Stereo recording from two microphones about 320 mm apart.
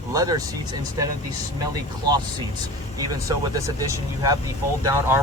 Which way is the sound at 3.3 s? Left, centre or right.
Centre.